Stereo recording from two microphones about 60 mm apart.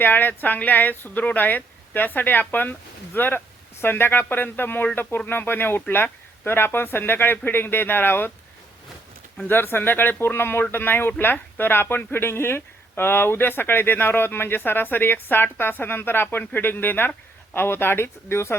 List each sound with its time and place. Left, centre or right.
0.0 s speech: left
9.5 s speech: left